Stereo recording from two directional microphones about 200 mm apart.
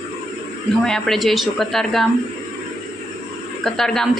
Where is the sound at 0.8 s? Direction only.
Centre (ahead or behind).